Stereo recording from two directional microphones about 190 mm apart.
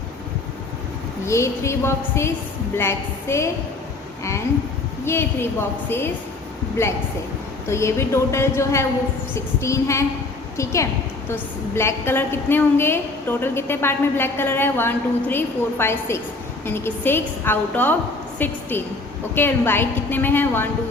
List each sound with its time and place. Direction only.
1.2 s a woman's voice: 15° left (ahead or behind)
6.8 s a woman's voice: 15° left (ahead or behind)